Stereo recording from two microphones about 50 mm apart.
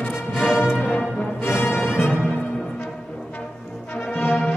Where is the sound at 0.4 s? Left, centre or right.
Left.